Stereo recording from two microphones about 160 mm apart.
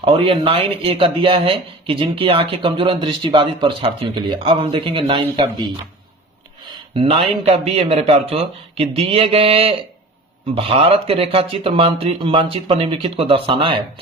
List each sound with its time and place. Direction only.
0.0 s speech: 35° right (ahead or behind)
6.9 s speech: 35° right (ahead or behind)